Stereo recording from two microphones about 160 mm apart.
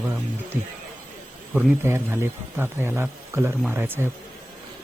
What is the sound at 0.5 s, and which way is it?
Speech, 15° right (ahead or behind).